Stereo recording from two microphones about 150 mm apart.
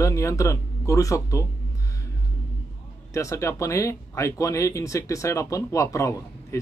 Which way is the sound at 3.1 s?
20° left (ahead or behind).